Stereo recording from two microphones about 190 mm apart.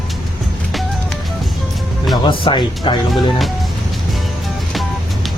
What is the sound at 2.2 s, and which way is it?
Speech, 25° left (ahead or behind).